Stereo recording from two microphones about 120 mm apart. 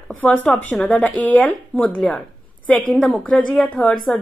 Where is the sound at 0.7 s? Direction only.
5° left (ahead or behind).